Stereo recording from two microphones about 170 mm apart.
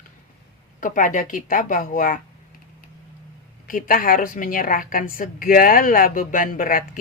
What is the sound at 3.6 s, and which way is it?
A woman's voice, 55° left (ahead or behind).